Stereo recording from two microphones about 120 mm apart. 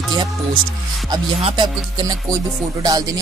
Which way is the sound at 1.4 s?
45° right (ahead or behind).